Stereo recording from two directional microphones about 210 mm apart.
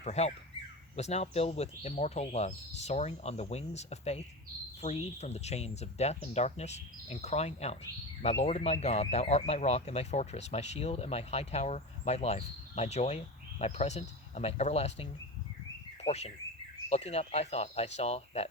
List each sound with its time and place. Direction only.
0.0 s speech: 30° left (ahead or behind)